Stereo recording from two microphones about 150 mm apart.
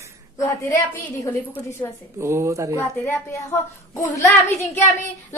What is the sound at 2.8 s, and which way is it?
A woman's voice, 15° left (ahead or behind).